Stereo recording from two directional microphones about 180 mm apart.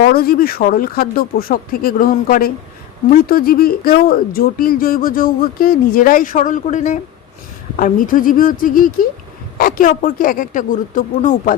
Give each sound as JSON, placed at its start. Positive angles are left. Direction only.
{"t": 0.1, "sound": "speech", "side_deg": 55}